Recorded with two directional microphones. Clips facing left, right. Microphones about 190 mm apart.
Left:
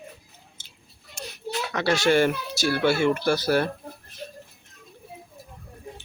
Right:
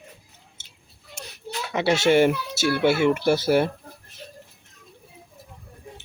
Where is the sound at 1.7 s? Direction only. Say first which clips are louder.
Right 2 dB; 20° right (ahead or behind).